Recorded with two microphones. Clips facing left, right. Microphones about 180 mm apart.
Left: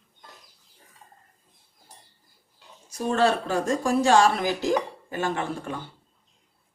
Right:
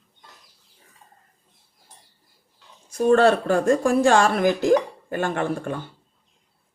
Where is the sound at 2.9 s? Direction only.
55° right (ahead or behind).